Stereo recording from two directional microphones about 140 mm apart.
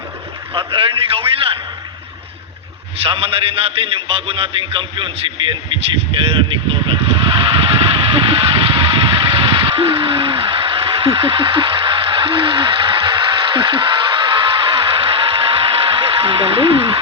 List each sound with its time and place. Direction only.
0.5 s a man's voice: 40° right (ahead or behind)
3.1 s a man's voice: 40° right (ahead or behind)
6.1 s vehicle: 40° right (ahead or behind)
9.1 s a sound: 40° right (ahead or behind)